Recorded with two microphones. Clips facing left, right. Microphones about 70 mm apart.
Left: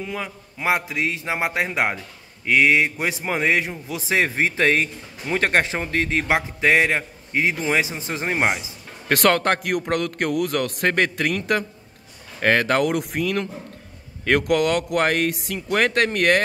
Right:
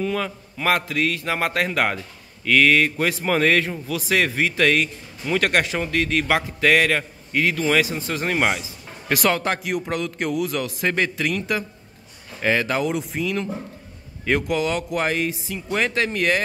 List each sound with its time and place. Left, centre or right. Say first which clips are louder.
0.0 s a man's voice: right 5 dB; centre
9.1 s a man's voice: left 3 dB; left